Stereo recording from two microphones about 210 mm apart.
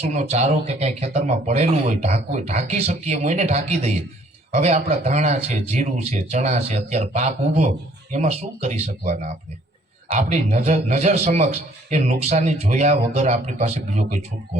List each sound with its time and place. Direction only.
0.0 s a man's voice: 30° right (ahead or behind)